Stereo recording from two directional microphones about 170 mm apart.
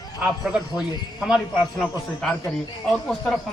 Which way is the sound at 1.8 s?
5° left (ahead or behind).